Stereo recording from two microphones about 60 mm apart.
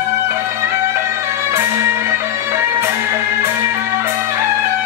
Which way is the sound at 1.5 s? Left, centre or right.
Right.